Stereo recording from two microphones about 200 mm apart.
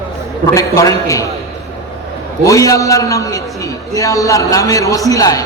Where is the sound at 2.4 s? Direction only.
15° left (ahead or behind).